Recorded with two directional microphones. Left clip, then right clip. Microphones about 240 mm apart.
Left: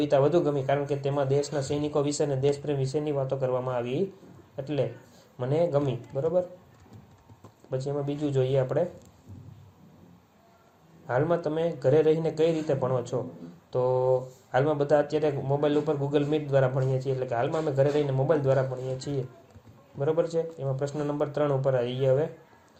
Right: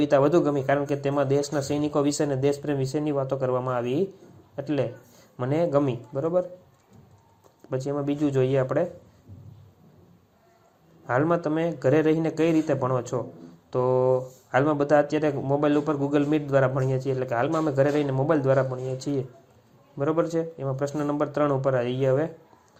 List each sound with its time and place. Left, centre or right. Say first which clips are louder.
0.0 s speech: right 3 dB; right
7.7 s speech: right 3 dB; right
11.0 s speech: right 2 dB; right